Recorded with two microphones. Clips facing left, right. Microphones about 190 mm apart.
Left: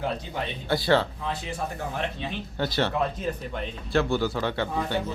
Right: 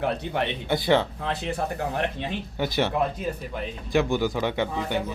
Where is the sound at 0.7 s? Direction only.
20° right (ahead or behind).